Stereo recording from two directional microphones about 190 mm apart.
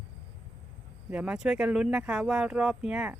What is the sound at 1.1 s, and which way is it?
Speech, 5° right (ahead or behind).